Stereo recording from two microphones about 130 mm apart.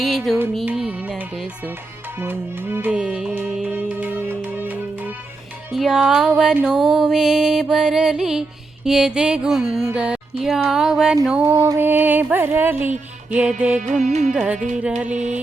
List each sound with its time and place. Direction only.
0.3 s music: centre (ahead or behind)
0.6 s music: 10° right (ahead or behind)
11.5 s music: 25° right (ahead or behind); by 13.8 s 10° right (ahead or behind)
14.1 s music: 60° right (ahead or behind)
14.3 s music: 10° right (ahead or behind)
15.1 s music: 65° right (ahead or behind)